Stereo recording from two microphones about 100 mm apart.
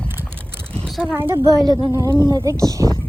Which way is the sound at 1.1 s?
20° right (ahead or behind).